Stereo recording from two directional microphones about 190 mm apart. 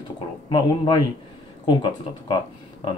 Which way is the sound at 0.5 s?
25° left (ahead or behind).